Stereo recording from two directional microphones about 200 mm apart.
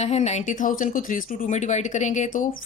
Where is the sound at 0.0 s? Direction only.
35° left (ahead or behind).